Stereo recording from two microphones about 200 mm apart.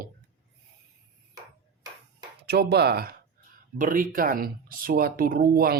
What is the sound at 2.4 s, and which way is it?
Speech, 55° right (ahead or behind).